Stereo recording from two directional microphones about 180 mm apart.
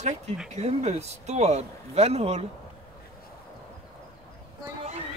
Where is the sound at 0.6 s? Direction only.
35° right (ahead or behind).